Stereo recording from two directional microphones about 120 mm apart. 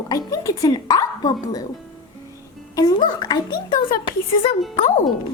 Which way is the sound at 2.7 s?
35° left (ahead or behind).